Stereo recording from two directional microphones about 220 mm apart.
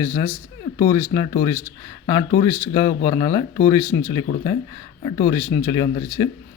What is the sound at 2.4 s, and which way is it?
Speech, 20° left (ahead or behind).